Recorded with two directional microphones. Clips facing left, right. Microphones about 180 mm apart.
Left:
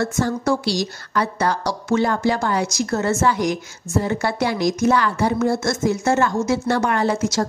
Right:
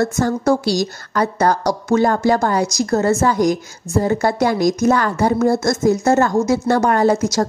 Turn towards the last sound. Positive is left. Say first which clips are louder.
# right 5 dB
turn(degrees=-40)  # may be behind; listen again after turning